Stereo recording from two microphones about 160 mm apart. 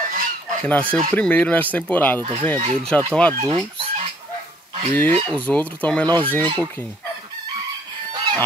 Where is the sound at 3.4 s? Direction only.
35° right (ahead or behind).